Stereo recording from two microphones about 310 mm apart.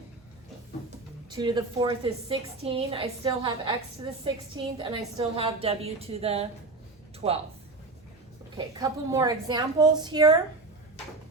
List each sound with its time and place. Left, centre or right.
1.4 s a woman's voice: centre
8.5 s a woman's voice: centre